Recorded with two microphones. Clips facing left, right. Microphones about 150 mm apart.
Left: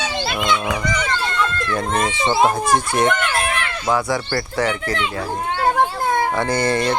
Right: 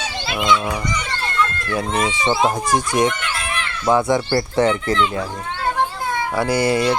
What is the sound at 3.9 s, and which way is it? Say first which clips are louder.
Speech: right 4 dB; 20° right (ahead or behind).